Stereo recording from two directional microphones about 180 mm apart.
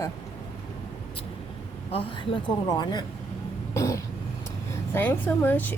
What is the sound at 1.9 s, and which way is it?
Speech, 30° left (ahead or behind).